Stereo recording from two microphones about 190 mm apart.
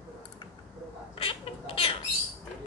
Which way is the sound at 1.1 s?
30° left (ahead or behind).